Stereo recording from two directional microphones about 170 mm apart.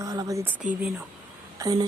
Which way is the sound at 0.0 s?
20° right (ahead or behind).